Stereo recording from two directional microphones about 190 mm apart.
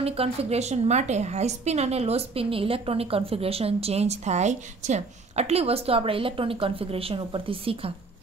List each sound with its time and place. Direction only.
0.0 s a woman's voice: 30° right (ahead or behind)